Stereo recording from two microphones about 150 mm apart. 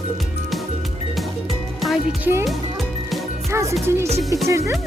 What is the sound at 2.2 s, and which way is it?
Speech, 15° right (ahead or behind).